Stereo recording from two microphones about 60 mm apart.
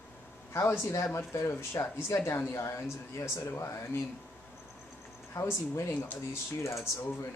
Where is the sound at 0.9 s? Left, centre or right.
Left.